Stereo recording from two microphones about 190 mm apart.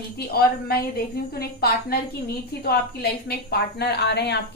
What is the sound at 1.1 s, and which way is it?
A woman's voice, 55° left (ahead or behind).